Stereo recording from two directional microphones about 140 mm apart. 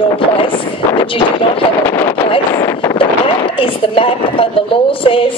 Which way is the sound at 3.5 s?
40° left (ahead or behind).